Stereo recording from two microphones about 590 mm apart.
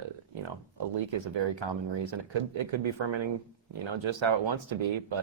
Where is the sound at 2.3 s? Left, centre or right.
Right.